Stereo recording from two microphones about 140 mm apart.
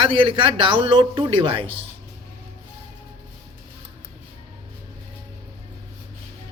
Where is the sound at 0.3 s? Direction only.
40° right (ahead or behind).